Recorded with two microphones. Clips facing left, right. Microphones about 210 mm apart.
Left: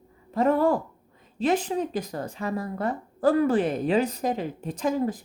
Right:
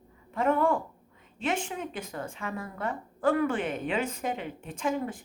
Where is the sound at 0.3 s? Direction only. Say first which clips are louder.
Left 4 dB; 35° left (ahead or behind).